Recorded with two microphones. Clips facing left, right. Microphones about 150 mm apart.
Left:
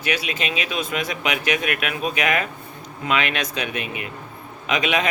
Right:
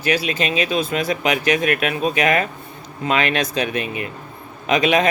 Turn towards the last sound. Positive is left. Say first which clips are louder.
# right 5 dB
turn(degrees=-40)  # may be behind; listen again after turning